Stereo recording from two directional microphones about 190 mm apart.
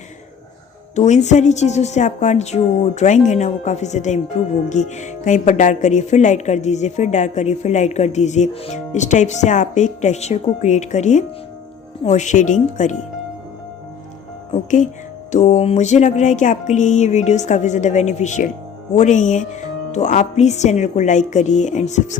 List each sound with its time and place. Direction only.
0.9 s speech: 40° left (ahead or behind)
15.3 s speech: 40° left (ahead or behind)